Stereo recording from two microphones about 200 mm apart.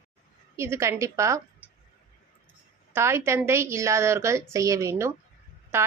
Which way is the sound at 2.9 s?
15° right (ahead or behind).